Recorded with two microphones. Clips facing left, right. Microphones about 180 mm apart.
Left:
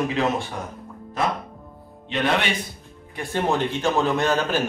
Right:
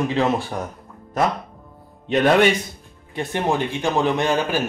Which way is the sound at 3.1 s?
15° right (ahead or behind).